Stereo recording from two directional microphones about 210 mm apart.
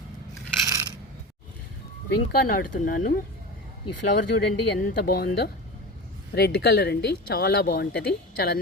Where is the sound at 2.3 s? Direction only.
40° left (ahead or behind).